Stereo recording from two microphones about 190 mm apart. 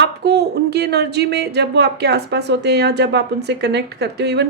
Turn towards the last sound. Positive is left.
turn(degrees=-60)  # may be behind; listen again after turning